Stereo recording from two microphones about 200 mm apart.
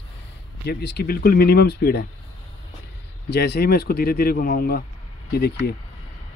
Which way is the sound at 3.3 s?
55° left (ahead or behind).